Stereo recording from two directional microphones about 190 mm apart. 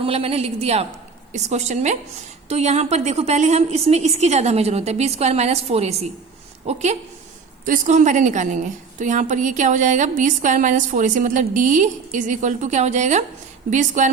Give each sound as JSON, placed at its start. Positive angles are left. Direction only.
{"t": 0.0, "sound": "a woman's voice", "side_deg": -30}